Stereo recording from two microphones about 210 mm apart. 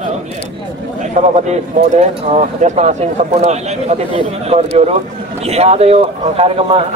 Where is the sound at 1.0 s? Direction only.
35° right (ahead or behind).